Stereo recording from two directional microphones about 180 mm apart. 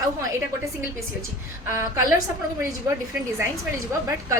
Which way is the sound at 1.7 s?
15° right (ahead or behind).